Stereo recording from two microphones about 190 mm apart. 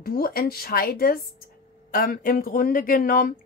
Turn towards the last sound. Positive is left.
turn(degrees=50)  # may be behind; listen again after turning